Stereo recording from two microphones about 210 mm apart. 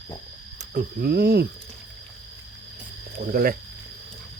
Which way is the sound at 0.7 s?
50° right (ahead or behind).